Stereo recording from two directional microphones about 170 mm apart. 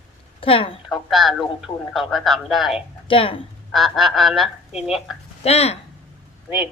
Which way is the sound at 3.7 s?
Centre (ahead or behind).